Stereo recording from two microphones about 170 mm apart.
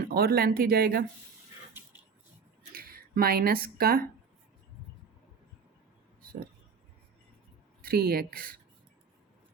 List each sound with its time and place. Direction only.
0.1 s speech: 65° right (ahead or behind)
1.7 s a sound: 15° right (ahead or behind)
2.7 s speech: 60° right (ahead or behind)
7.8 s speech: 65° right (ahead or behind)